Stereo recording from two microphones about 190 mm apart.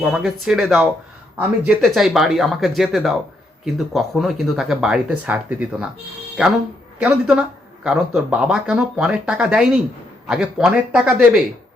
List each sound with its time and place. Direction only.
0.0 s speech: centre (ahead or behind)
7.0 s speech: 5° right (ahead or behind)